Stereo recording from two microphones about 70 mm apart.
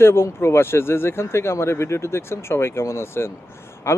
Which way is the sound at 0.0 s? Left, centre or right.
Left.